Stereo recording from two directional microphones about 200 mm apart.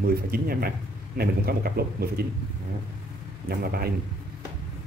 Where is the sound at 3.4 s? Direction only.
50° right (ahead or behind).